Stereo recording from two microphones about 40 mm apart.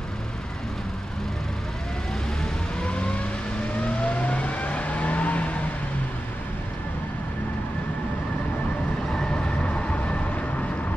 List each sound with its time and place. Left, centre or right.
2.8 s vehicle: left
9.3 s vehicle: left